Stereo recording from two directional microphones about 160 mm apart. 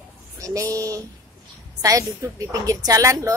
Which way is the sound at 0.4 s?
20° right (ahead or behind).